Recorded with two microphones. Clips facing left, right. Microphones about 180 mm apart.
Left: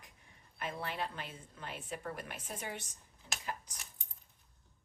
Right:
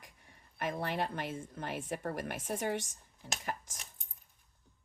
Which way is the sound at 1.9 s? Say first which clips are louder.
Right 3 dB; 45° right (ahead or behind).